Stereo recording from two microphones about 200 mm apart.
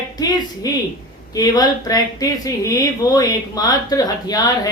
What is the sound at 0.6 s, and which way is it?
Speech, 20° left (ahead or behind).